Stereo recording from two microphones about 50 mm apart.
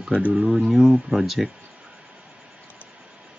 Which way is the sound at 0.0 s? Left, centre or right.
Right.